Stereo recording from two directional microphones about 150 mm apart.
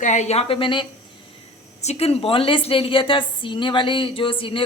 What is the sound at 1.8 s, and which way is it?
Speech, 45° left (ahead or behind).